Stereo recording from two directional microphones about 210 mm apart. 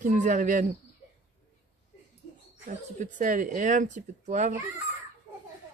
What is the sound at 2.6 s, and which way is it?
Speech, 40° right (ahead or behind).